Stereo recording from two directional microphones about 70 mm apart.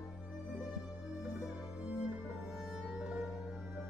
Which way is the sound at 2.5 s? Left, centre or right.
Centre.